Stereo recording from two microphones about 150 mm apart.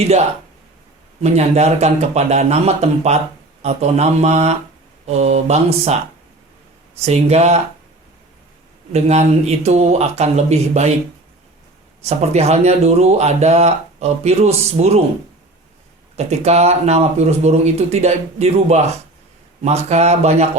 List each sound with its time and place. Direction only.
1.2 s speech: 45° right (ahead or behind)
7.0 s speech: 45° right (ahead or behind)
8.9 s speech: 45° right (ahead or behind)
12.0 s speech: 45° right (ahead or behind)
16.1 s speech: 45° right (ahead or behind)